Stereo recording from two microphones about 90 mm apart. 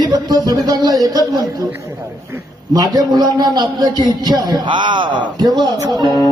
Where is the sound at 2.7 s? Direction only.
50° right (ahead or behind).